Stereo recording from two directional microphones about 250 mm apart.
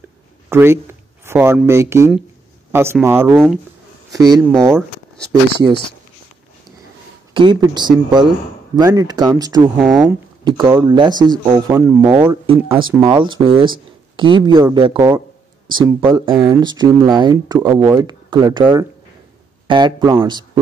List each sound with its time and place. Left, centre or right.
0.5 s a man's voice: centre
4.7 s a sound: centre
7.3 s speech: centre
9.8 s speech: centre
10.4 s speech: centre
12.4 s speech: right